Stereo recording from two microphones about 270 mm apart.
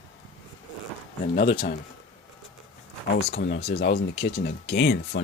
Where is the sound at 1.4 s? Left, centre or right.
Left.